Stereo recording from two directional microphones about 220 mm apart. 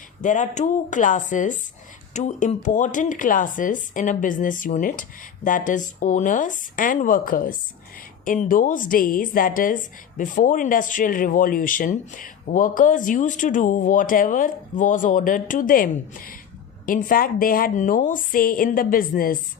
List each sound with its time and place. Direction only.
0.2 s a woman's voice: 35° left (ahead or behind)